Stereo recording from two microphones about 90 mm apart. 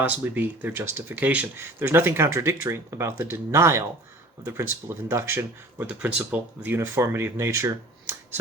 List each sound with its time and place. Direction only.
0.0 s speech: 20° right (ahead or behind)
5.9 s speech: 10° right (ahead or behind)
6.7 s speech: 30° right (ahead or behind)